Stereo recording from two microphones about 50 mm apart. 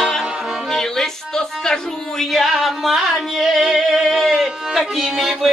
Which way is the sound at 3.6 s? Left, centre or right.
Centre.